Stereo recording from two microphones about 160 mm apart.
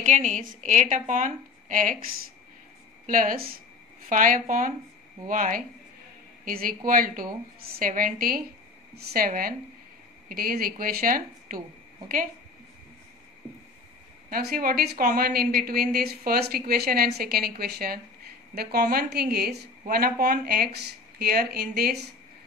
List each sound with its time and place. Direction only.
0.0 s a woman's voice: 50° right (ahead or behind)
3.1 s speech: 60° right (ahead or behind)
8.9 s a woman's voice: 75° right (ahead or behind)
14.3 s a woman's voice: 70° right (ahead or behind); by 19.7 s 85° right
19.9 s a woman's voice: 70° right (ahead or behind); by 22.1 s 85° right